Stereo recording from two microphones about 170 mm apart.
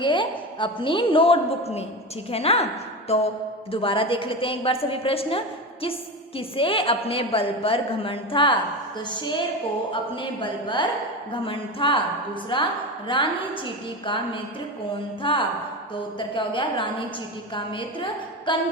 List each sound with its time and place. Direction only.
0.0 s a woman's voice: 30° left (ahead or behind)
9.9 s a woman's voice: 30° left (ahead or behind)